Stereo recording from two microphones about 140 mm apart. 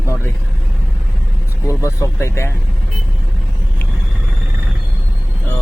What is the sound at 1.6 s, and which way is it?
Speech, 20° left (ahead or behind).